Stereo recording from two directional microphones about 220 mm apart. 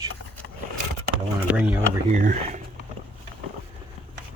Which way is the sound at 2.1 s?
35° right (ahead or behind).